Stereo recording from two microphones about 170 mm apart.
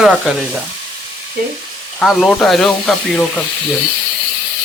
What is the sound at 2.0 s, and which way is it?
Speech, centre (ahead or behind).